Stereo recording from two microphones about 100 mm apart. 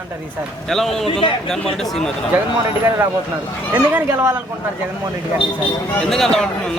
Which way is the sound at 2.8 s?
30° right (ahead or behind).